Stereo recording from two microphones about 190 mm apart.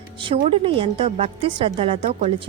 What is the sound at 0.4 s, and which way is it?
A woman's voice, 30° right (ahead or behind).